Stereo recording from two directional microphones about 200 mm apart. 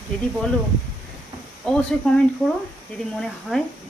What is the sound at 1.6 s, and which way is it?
Speech, 5° left (ahead or behind).